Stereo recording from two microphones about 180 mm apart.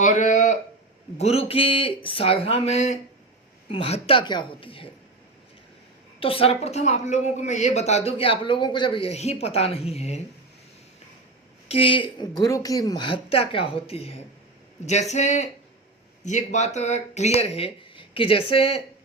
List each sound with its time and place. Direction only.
0.0 s a sound: 45° left (ahead or behind)
1.2 s a woman's voice: 35° left (ahead or behind)
6.1 s a woman's voice: 30° left (ahead or behind)
11.7 s a woman's voice: 30° left (ahead or behind)